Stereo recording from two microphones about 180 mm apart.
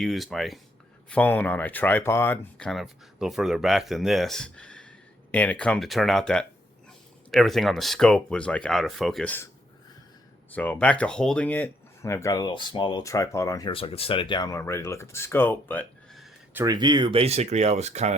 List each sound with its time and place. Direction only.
0.0 s speech: centre (ahead or behind)
10.5 s speech: 10° left (ahead or behind)
16.6 s speech: 25° right (ahead or behind); by 18.2 s 40° right (ahead or behind)